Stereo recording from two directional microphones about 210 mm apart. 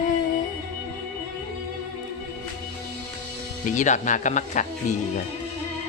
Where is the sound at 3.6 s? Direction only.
35° left (ahead or behind).